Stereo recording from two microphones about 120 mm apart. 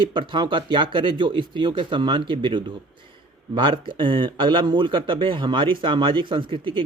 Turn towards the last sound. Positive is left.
turn(degrees=-45)  # may be behind; listen again after turning